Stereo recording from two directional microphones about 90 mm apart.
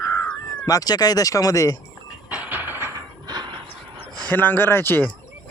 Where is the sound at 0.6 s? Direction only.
45° left (ahead or behind).